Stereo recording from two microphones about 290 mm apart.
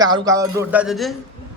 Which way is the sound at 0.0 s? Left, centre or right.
Centre.